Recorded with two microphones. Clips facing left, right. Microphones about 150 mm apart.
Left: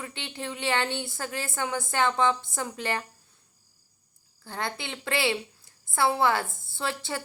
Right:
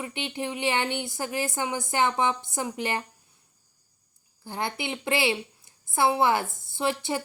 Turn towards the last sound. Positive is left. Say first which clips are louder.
# right 5 dB
turn(degrees=-20)  # may be behind; listen again after turning